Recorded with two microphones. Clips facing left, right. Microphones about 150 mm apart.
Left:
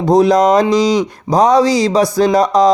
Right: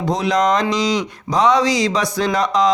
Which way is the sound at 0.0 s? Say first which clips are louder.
Left 8 dB; 35° left (ahead or behind).